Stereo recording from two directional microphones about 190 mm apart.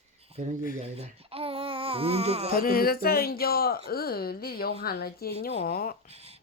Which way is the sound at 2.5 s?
50° left (ahead or behind).